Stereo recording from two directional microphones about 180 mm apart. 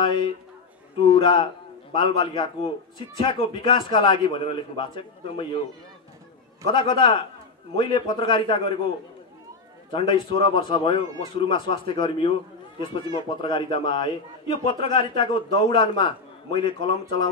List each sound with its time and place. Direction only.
0.0 s a man's voice: 25° left (ahead or behind)
6.7 s a man's voice: 25° left (ahead or behind)
9.8 s a man's voice: 25° left (ahead or behind)